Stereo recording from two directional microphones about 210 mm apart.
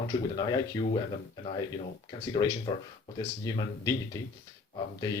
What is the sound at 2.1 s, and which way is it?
Speech, 20° left (ahead or behind).